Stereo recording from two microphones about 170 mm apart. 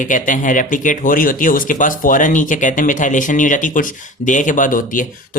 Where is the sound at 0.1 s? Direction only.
50° left (ahead or behind).